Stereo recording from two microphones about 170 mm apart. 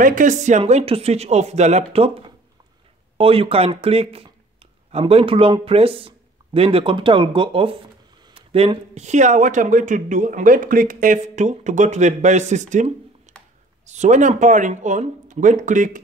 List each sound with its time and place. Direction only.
0.0 s speech: 50° right (ahead or behind)